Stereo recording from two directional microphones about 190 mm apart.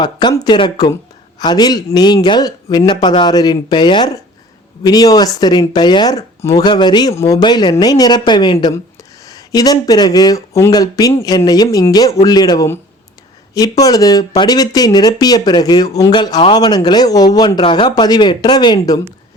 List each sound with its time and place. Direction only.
0.0 s speech: 25° left (ahead or behind)